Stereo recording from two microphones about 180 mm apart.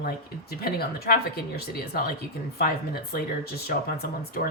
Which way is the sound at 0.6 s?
55° left (ahead or behind).